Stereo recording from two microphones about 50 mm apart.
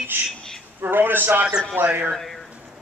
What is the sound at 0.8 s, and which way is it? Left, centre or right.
A woman's voice, right.